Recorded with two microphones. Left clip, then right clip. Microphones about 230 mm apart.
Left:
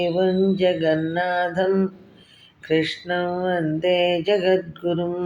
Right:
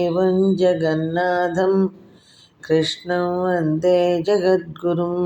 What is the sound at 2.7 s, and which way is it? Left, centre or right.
Mantra, right.